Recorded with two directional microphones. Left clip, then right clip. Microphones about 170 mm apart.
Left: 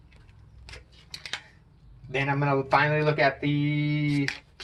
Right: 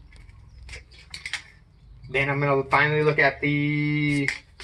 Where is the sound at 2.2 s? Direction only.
35° left (ahead or behind).